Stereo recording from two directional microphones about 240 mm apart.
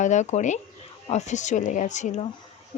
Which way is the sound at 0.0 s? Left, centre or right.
Left.